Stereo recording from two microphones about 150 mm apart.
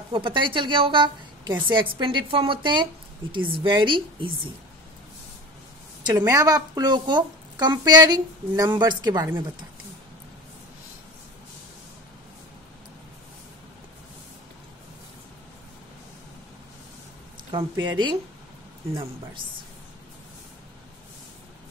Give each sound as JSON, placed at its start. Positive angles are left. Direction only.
{"t": 0.1, "sound": "a woman's voice", "side_deg": -35}
{"t": 6.0, "sound": "a woman's voice", "side_deg": -25}
{"t": 17.5, "sound": "a woman's voice", "side_deg": -35}